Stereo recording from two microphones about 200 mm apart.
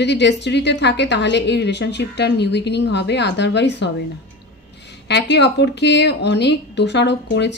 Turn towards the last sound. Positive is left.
turn(degrees=60)  # may be behind; listen again after turning